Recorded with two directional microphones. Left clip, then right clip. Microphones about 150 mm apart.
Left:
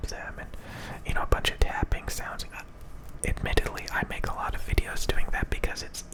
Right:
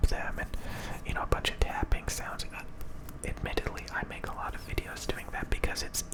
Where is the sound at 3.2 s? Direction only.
25° left (ahead or behind); by 5.9 s 5° left (ahead or behind).